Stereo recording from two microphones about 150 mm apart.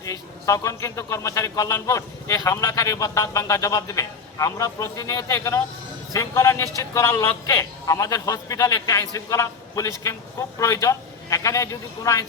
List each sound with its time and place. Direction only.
0.0 s a man's voice: 20° left (ahead or behind)